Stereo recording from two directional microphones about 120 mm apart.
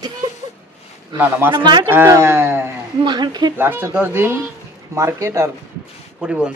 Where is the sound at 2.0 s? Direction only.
20° right (ahead or behind).